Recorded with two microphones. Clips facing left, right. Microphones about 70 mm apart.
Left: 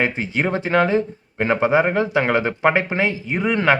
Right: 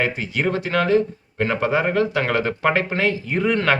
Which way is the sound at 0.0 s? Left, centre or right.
Left.